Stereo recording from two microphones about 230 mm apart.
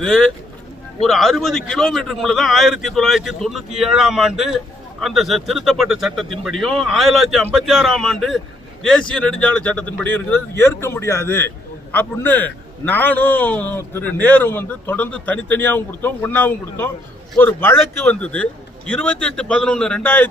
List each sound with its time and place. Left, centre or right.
0.0 s a man's voice: centre